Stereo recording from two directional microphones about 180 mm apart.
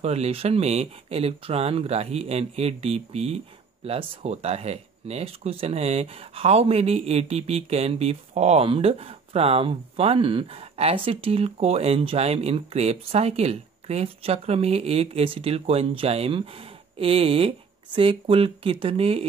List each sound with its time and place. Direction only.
0.0 s speech: 35° right (ahead or behind)